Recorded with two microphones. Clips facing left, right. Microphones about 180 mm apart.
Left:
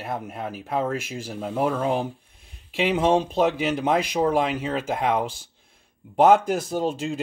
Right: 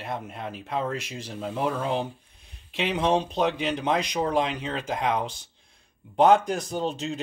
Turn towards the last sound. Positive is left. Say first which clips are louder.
# left 3 dB
turn(degrees=10)  # may be behind; listen again after turning